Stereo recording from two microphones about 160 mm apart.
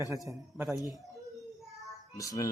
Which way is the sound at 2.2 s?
20° left (ahead or behind).